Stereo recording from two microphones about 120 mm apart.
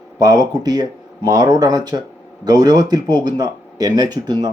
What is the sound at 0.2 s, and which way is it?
Speech, 35° right (ahead or behind).